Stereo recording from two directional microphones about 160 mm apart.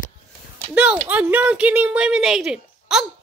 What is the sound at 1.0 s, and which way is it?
Speech, 10° right (ahead or behind).